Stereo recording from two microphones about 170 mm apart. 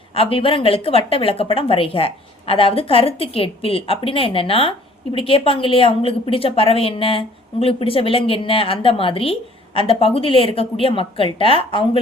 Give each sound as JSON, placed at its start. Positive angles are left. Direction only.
{"t": 0.1, "sound": "a woman's voice", "side_deg": 35}